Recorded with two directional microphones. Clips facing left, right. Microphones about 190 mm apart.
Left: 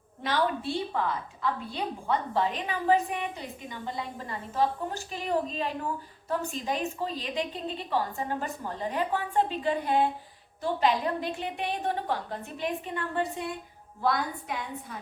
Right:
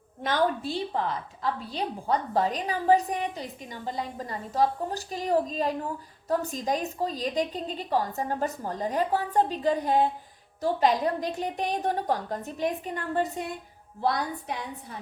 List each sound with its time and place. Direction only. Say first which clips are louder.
0.2 s a woman's voice: right 2 dB; 45° right (ahead or behind)